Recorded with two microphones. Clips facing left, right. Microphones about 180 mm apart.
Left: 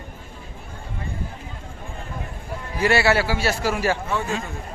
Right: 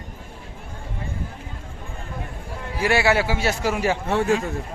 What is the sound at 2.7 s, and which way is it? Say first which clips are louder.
A man's voice: left 1 dB; 10° right (ahead or behind).